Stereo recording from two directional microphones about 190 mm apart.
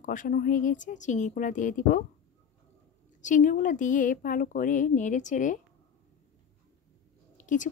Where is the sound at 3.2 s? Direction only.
40° left (ahead or behind).